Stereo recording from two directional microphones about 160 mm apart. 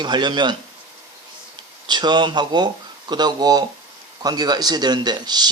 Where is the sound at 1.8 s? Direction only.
25° right (ahead or behind).